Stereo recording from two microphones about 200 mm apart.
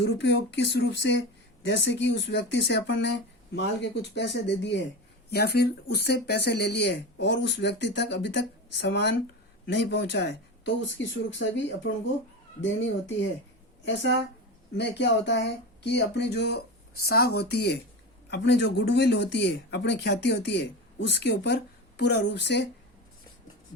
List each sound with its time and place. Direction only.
0.0 s speech: 60° left (ahead or behind)
13.8 s speech: 65° left (ahead or behind)